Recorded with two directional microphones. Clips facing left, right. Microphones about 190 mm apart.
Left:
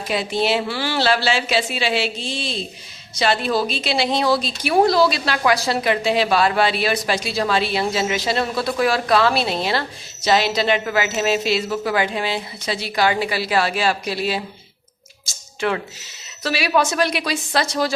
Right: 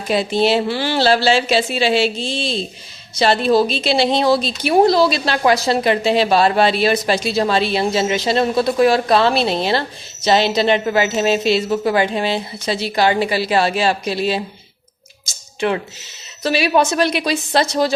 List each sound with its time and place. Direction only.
0.1 s a woman's voice: 30° right (ahead or behind)
15.2 s a sound: 20° right (ahead or behind)
16.4 s a woman's voice: 25° right (ahead or behind)